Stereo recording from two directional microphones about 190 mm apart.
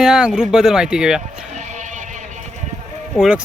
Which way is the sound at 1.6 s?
40° right (ahead or behind).